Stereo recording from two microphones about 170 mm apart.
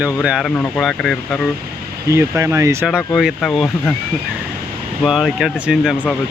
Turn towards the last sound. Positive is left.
turn(degrees=-5)  # may be behind; listen again after turning